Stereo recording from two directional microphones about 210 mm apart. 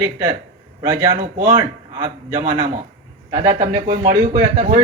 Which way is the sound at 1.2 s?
40° right (ahead or behind).